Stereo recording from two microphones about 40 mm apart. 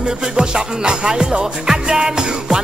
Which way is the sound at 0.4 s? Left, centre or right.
Centre.